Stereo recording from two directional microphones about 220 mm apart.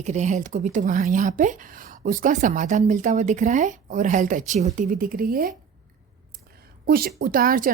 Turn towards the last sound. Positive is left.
turn(degrees=-40)  # may be behind; listen again after turning